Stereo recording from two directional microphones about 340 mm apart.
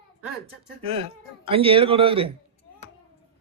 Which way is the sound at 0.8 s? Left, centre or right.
Centre.